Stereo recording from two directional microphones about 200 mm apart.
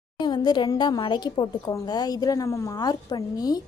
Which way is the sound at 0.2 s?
20° left (ahead or behind).